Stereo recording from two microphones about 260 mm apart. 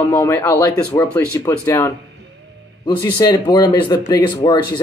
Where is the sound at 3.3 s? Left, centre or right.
Centre.